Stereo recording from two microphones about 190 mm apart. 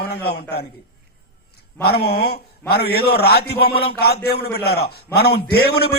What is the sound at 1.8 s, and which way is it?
A man's voice, 55° left (ahead or behind).